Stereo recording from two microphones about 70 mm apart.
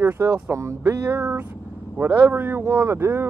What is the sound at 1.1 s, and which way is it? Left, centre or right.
Speech, right.